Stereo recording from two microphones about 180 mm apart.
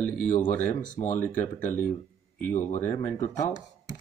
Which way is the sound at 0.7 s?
45° left (ahead or behind).